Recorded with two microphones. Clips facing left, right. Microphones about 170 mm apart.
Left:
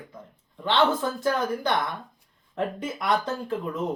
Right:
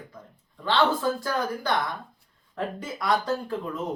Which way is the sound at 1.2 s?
20° left (ahead or behind).